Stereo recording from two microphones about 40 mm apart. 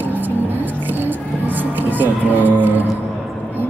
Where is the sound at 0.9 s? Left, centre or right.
Right.